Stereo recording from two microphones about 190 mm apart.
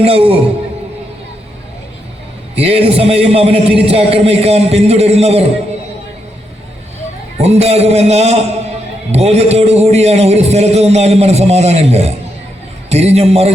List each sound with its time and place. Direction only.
0.0 s a man's voice: 30° right (ahead or behind)
2.6 s a man's voice: 30° right (ahead or behind)
7.3 s a man's voice: 35° right (ahead or behind)